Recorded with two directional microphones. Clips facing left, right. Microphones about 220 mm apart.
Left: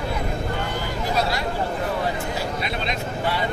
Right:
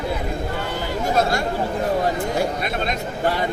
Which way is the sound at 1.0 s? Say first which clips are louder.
Right 4 dB; 50° right (ahead or behind).